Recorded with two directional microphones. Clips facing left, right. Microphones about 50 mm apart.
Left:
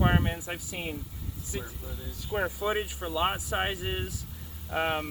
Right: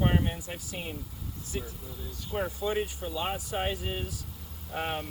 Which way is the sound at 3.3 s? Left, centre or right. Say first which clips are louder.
Left 1 dB; left.